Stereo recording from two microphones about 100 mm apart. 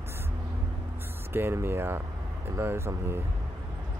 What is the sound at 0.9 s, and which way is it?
Speech, 25° right (ahead or behind).